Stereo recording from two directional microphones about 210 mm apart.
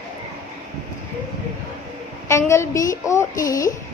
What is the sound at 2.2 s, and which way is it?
A woman's voice, 15° left (ahead or behind).